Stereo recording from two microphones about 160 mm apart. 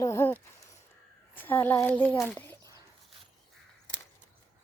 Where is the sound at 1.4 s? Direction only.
10° left (ahead or behind).